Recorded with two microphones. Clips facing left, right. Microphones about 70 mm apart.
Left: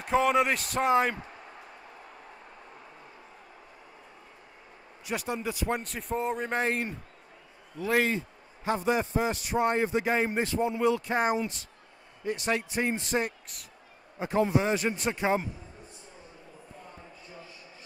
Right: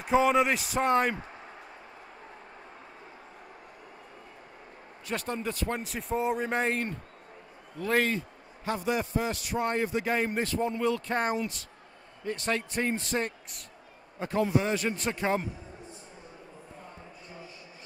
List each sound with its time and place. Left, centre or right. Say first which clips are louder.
0.0 s a man's voice: right 1 dB; centre
5.0 s a man's voice: left 1 dB; centre
5.8 s a man's voice: right 1 dB; centre
8.6 s a man's voice: left 3 dB; left